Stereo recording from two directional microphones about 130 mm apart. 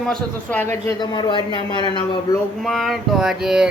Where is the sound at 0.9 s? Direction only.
35° left (ahead or behind).